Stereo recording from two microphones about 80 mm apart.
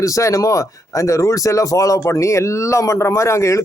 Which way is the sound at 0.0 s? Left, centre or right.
Left.